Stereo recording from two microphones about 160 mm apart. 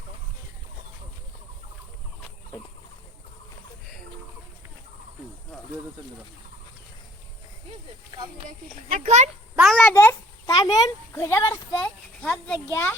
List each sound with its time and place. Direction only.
8.4 s a child's voice: 50° right (ahead or behind)
9.6 s a child's voice: centre (ahead or behind)
9.9 s a sound: 15° left (ahead or behind)
10.5 s a child's voice: 25° left (ahead or behind); by 12.5 s 5° left (ahead or behind)